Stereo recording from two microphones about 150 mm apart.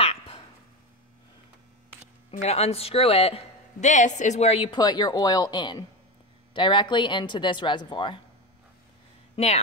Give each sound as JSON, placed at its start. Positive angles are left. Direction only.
{"t": 0.0, "sound": "a sound", "side_deg": 40}
{"t": 2.4, "sound": "speech", "side_deg": 45}
{"t": 3.8, "sound": "a woman's voice", "side_deg": 55}
{"t": 4.6, "sound": "a woman's voice", "side_deg": 30}
{"t": 9.3, "sound": "speech", "side_deg": 45}